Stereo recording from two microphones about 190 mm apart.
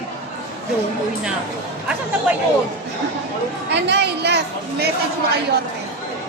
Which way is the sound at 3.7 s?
60° right (ahead or behind).